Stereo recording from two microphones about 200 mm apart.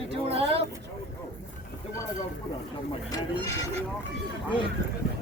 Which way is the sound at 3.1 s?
15° left (ahead or behind).